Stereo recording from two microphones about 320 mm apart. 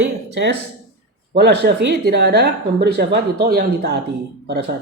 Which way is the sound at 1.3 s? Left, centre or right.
Right.